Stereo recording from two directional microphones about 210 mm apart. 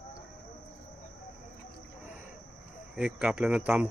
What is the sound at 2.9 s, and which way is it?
Speech, 5° right (ahead or behind).